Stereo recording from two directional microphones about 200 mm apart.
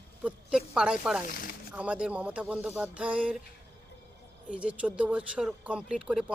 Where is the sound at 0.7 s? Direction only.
5° right (ahead or behind).